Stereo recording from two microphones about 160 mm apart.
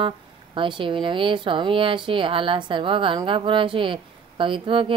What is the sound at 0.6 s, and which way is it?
Speech, 30° right (ahead or behind).